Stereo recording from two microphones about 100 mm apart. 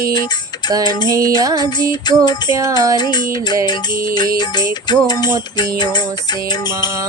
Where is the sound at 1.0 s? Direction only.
35° right (ahead or behind).